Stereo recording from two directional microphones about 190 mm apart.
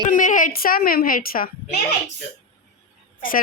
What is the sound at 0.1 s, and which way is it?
A woman's voice, 45° left (ahead or behind).